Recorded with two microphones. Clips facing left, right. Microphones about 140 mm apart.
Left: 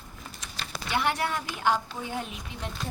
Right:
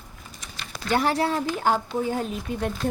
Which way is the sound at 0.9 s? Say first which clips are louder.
Right 6 dB; 35° right (ahead or behind).